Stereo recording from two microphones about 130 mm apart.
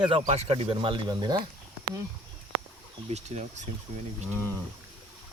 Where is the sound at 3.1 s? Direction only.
60° right (ahead or behind).